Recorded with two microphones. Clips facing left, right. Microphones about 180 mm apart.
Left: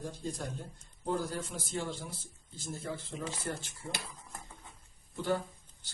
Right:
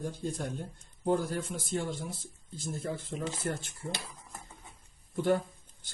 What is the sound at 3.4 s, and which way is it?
Speech, 55° right (ahead or behind).